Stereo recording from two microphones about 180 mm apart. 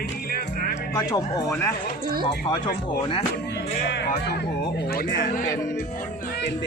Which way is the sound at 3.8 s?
70° left (ahead or behind).